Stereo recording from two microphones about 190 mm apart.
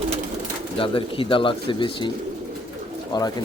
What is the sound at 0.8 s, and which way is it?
Speech, 30° left (ahead or behind).